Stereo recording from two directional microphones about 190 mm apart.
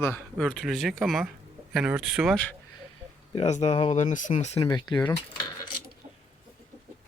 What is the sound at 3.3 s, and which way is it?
Speech, 35° left (ahead or behind).